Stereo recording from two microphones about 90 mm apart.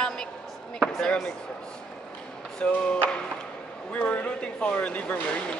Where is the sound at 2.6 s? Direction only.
15° left (ahead or behind).